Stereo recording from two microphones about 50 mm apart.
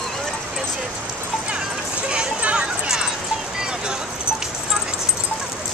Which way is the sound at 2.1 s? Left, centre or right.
Right.